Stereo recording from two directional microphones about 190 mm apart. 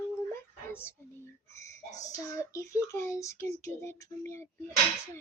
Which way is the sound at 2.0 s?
15° left (ahead or behind).